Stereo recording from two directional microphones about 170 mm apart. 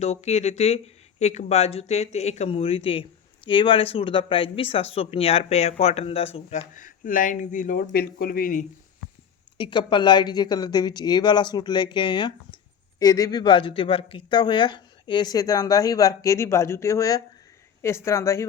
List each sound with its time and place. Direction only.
0.0 s speech: 40° left (ahead or behind)
6.7 s speech: 50° left (ahead or behind)
9.6 s speech: 30° left (ahead or behind)